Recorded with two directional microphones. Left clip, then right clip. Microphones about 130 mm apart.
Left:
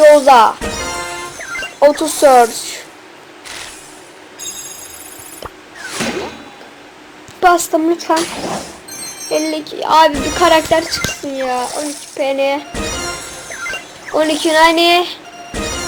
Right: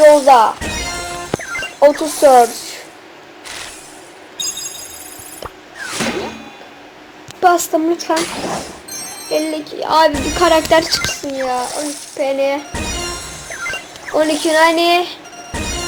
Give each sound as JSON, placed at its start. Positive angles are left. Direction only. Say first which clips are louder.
{"t": 0.3, "sound": "speech", "louder": "left 1 dB", "side_deg": 55}
{"t": 0.6, "sound": "music", "louder": "left 1 dB", "side_deg": 0}
{"t": 1.9, "sound": "speech", "louder": "left 1 dB", "side_deg": 0}
{"t": 3.4, "sound": "a sound", "louder": "even", "side_deg": 0}
{"t": 5.4, "sound": "music", "louder": "right 1 dB", "side_deg": 0}
{"t": 7.3, "sound": "a woman's voice", "louder": "left 1 dB", "side_deg": 0}
{"t": 10.4, "sound": "speech", "louder": "left 1 dB", "side_deg": -25}
{"t": 10.8, "sound": "speech", "louder": "right 1 dB", "side_deg": 10}
{"t": 12.2, "sound": "speech", "louder": "left 1 dB", "side_deg": 15}
{"t": 12.7, "sound": "music", "louder": "left 1 dB", "side_deg": 0}